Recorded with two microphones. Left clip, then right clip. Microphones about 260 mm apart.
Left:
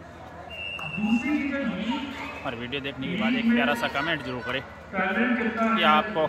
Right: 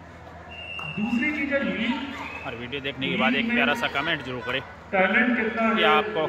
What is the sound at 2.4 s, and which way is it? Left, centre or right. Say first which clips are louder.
A man's voice: left 1 dB; centre.